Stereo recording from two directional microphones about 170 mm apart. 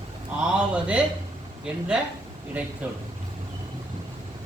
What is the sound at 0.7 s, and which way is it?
Speech, 5° right (ahead or behind).